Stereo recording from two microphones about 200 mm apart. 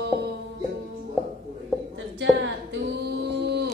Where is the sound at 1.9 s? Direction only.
65° right (ahead or behind).